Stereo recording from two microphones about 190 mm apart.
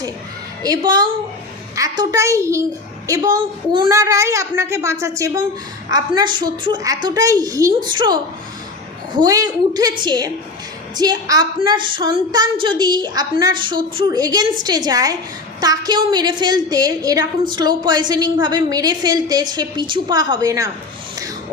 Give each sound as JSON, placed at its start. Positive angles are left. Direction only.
{"t": 0.6, "sound": "a woman's voice", "side_deg": -20}